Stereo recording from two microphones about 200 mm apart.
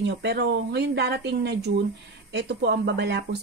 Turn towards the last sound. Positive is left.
turn(degrees=-55)  # may be behind; listen again after turning